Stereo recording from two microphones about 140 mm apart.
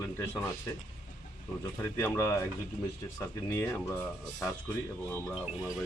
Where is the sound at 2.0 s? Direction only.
15° left (ahead or behind).